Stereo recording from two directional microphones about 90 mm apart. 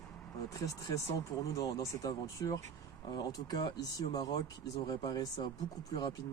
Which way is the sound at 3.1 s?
55° left (ahead or behind).